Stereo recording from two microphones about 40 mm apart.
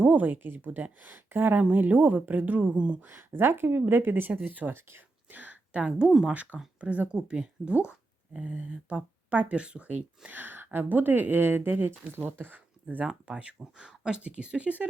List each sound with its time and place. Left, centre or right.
0.0 s speech: right
0.3 s a woman's voice: right
3.1 s speech: right
4.3 s speech: right
4.7 s speech: right
5.3 s a sound: right
6.3 s speech: right
8.4 s speech: right
10.3 s speech: right
12.5 s speech: right
13.2 s speech: right